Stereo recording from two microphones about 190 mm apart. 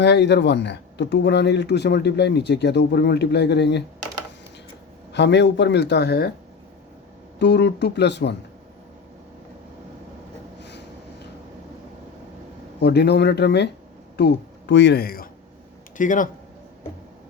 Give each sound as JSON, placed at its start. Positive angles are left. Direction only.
{"t": 0.0, "sound": "speech", "side_deg": 65}
{"t": 5.1, "sound": "speech", "side_deg": 65}
{"t": 7.3, "sound": "speech", "side_deg": 60}
{"t": 10.6, "sound": "a sound", "side_deg": 65}
{"t": 12.8, "sound": "speech", "side_deg": 60}